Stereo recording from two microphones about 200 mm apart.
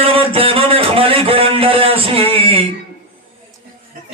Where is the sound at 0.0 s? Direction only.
25° right (ahead or behind).